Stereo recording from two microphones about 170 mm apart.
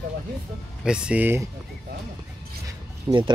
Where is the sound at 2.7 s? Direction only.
25° right (ahead or behind).